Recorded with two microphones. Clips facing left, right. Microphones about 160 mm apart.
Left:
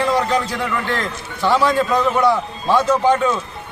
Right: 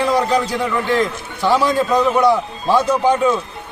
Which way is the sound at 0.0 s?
10° right (ahead or behind).